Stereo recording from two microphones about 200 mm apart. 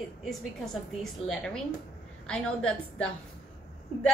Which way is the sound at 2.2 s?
5° left (ahead or behind).